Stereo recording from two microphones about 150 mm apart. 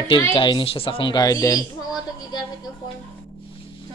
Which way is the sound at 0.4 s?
35° left (ahead or behind).